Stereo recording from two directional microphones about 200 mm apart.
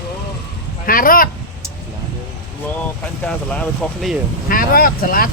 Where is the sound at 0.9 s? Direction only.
45° left (ahead or behind).